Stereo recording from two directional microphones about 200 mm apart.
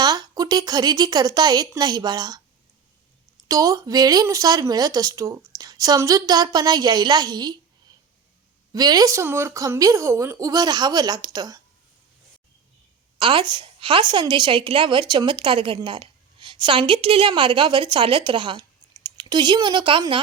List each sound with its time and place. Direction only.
0.0 s a woman's voice: 20° right (ahead or behind)
3.5 s a woman's voice: 15° right (ahead or behind)
8.7 s speech: 20° right (ahead or behind)
13.1 s a woman's voice: 25° right (ahead or behind)